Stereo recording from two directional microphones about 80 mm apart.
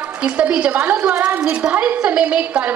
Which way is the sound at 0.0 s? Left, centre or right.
Centre.